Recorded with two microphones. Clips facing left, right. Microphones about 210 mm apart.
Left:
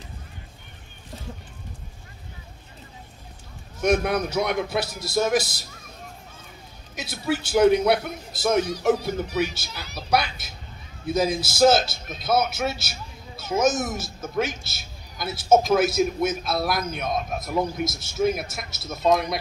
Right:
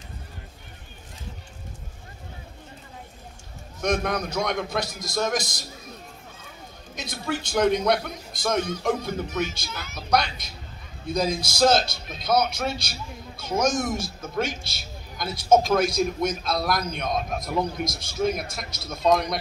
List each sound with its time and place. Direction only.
3.8 s a man's voice: 10° left (ahead or behind)
7.0 s a man's voice: 5° left (ahead or behind)
9.7 s a woman's voice: 35° left (ahead or behind)
10.1 s a man's voice: 5° left (ahead or behind)